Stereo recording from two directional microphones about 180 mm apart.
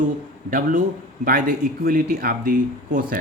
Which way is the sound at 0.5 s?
50° right (ahead or behind).